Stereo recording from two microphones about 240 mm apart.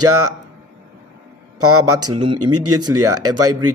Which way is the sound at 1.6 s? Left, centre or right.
Right.